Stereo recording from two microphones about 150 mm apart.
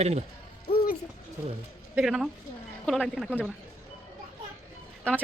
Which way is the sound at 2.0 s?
5° right (ahead or behind).